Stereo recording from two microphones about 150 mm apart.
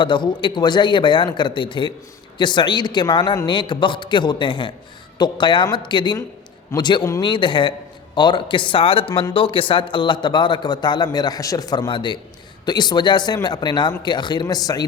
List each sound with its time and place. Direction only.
0.0 s a man's voice: 30° left (ahead or behind)